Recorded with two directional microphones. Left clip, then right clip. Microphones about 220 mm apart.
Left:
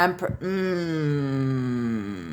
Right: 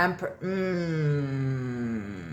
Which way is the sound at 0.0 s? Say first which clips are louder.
Left 4 dB; 40° left (ahead or behind).